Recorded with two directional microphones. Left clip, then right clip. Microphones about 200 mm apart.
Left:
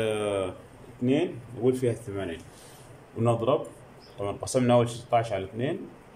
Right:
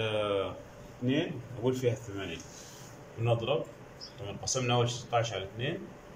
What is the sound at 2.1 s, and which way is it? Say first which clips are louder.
Speech: left 6 dB; 30° left (ahead or behind).